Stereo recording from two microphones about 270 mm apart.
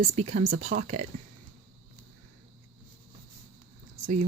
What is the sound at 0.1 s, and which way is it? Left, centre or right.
Speech, right.